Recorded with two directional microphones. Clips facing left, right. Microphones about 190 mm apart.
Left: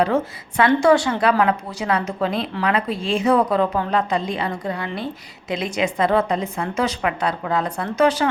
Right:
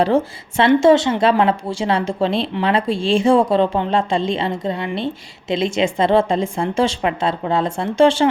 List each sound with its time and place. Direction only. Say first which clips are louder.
0.0 s speech: right 3 dB; 30° right (ahead or behind)